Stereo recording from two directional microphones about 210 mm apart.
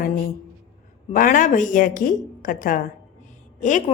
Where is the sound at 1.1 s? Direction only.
40° left (ahead or behind).